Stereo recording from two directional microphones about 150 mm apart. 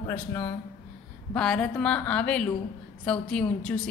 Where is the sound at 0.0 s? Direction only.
20° left (ahead or behind).